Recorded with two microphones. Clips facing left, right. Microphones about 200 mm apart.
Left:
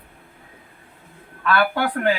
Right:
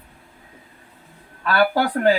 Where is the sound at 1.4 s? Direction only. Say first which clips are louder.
Right 2 dB; 35° right (ahead or behind).